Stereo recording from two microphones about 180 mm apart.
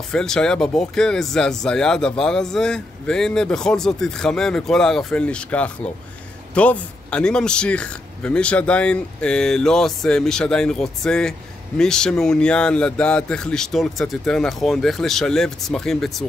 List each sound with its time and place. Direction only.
0.1 s speech: 5° left (ahead or behind)